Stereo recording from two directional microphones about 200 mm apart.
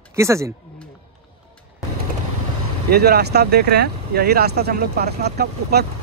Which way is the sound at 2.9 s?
55° right (ahead or behind).